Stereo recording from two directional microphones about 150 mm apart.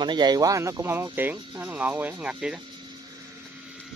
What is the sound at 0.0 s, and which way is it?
Speech, 30° right (ahead or behind).